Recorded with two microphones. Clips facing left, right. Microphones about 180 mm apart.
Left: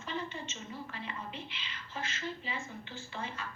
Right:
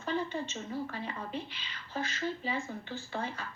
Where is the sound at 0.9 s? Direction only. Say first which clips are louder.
Right 4 dB; 40° right (ahead or behind).